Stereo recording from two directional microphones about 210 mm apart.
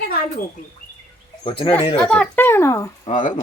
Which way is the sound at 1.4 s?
25° left (ahead or behind).